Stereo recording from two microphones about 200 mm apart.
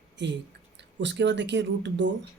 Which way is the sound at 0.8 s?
60° right (ahead or behind).